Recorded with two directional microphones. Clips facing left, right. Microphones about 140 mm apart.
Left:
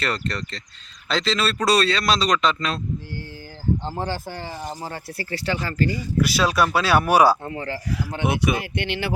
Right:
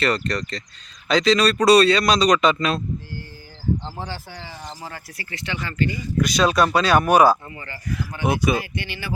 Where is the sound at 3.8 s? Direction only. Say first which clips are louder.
Left 5 dB; 50° left (ahead or behind).